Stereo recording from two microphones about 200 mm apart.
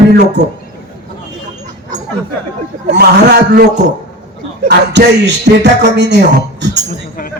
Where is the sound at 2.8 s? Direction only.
55° right (ahead or behind).